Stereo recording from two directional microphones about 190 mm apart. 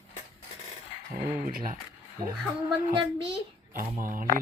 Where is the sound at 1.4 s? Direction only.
45° right (ahead or behind).